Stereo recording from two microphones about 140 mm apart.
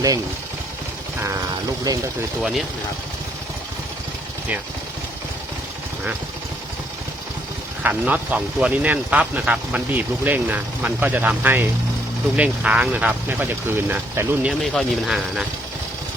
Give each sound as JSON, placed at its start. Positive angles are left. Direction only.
{"t": 1.9, "sound": "speech", "side_deg": -25}
{"t": 2.4, "sound": "speech", "side_deg": -5}
{"t": 7.8, "sound": "speech", "side_deg": -10}
{"t": 14.6, "sound": "speech", "side_deg": 0}